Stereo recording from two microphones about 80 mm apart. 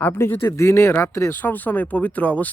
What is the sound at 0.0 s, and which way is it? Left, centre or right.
Speech, left.